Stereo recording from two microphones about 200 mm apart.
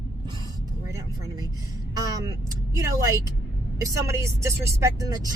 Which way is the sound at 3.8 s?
15° right (ahead or behind).